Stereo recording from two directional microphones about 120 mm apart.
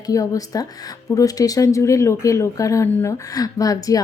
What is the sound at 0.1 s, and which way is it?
A woman's voice, 30° left (ahead or behind).